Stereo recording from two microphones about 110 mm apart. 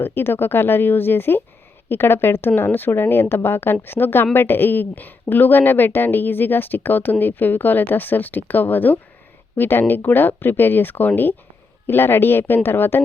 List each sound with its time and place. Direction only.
0.0 s speech: 20° left (ahead or behind)